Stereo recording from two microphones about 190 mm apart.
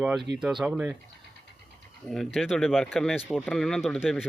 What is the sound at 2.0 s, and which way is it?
Speech, centre (ahead or behind).